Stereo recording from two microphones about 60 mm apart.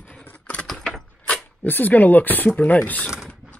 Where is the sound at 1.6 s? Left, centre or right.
Left.